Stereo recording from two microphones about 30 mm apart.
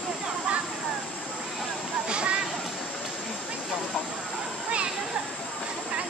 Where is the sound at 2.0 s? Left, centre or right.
Right.